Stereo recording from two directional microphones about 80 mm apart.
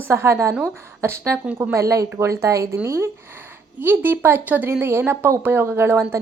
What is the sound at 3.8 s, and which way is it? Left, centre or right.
A woman's voice, right.